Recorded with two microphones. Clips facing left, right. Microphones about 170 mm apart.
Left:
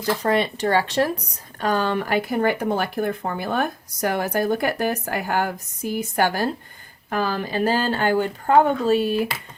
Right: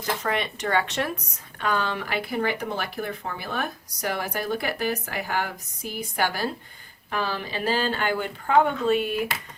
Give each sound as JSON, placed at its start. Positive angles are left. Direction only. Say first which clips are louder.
{"t": 0.0, "sound": "speech", "louder": "left 6 dB", "side_deg": 35}